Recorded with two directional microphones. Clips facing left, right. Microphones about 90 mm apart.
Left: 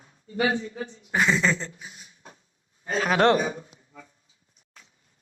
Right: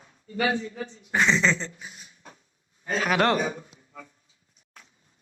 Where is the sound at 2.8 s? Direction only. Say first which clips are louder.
Left 2 dB; 30° left (ahead or behind).